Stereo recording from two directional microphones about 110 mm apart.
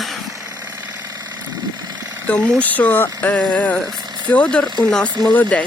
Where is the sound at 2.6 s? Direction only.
15° left (ahead or behind).